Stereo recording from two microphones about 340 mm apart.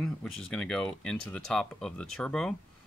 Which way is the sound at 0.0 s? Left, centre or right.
Centre.